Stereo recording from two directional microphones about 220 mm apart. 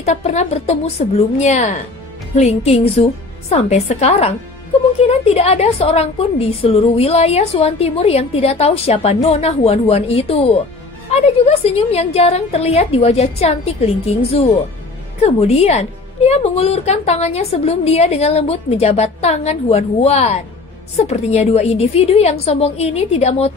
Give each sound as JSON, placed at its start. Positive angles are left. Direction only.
{"t": 0.0, "sound": "a woman's voice", "side_deg": 30}
{"t": 15.2, "sound": "a woman's voice", "side_deg": 30}